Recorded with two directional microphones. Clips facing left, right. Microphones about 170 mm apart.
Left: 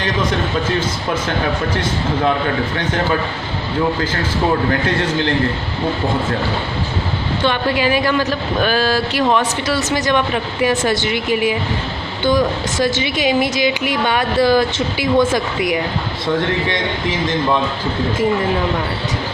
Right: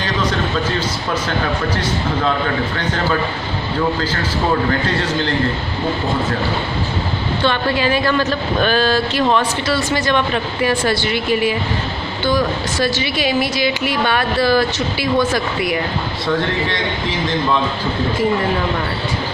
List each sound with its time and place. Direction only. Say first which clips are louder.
7.4 s speech: left 1 dB; 15° left (ahead or behind)